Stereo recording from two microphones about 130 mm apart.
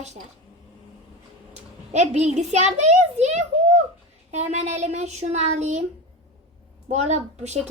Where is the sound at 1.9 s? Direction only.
60° right (ahead or behind).